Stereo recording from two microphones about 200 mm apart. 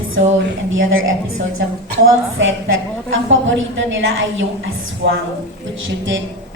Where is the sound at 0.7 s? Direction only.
80° right.